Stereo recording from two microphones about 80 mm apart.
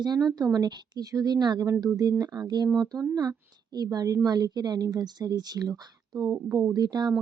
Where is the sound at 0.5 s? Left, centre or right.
Right.